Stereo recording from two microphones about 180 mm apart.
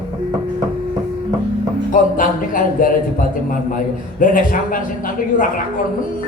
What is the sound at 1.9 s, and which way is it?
Speech, 50° left (ahead or behind).